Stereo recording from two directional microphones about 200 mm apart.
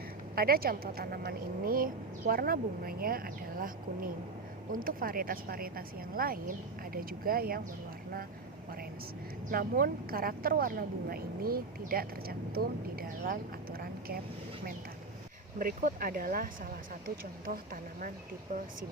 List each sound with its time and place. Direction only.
0.3 s speech: 50° right (ahead or behind)
9.5 s speech: 45° right (ahead or behind)
15.5 s speech: 45° right (ahead or behind)